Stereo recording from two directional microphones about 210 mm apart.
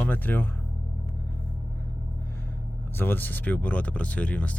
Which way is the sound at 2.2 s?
10° left (ahead or behind).